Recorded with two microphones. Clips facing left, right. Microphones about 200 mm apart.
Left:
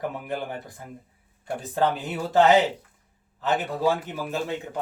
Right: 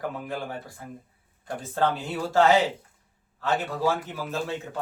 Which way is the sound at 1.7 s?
15° left (ahead or behind).